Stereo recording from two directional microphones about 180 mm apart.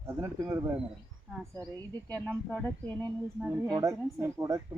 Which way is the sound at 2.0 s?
5° left (ahead or behind).